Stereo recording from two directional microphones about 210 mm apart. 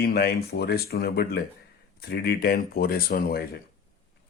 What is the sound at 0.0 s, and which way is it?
Speech, 50° left (ahead or behind).